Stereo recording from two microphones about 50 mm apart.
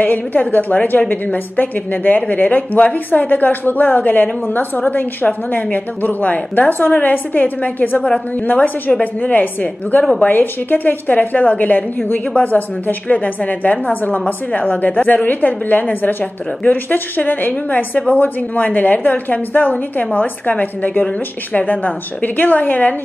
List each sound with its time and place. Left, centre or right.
0.0 s a woman's voice: left
9.0 s a woman's voice: left